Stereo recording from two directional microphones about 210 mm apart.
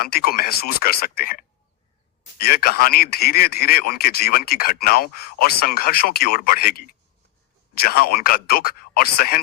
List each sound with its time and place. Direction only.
0.0 s a man's voice: 45° left (ahead or behind)